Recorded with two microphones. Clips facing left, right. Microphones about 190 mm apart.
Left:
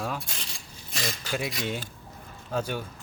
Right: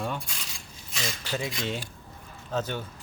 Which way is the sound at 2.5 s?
10° left (ahead or behind).